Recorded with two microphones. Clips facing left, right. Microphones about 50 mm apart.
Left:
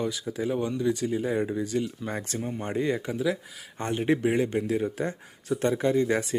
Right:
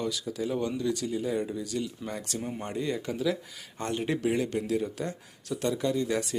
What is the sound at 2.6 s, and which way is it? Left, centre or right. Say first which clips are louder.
Speech: left 5 dB; left.